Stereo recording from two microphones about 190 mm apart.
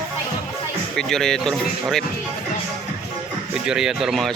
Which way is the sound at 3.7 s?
Centre (ahead or behind).